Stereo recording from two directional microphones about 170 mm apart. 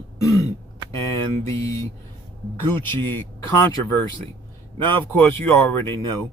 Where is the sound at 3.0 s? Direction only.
15° left (ahead or behind).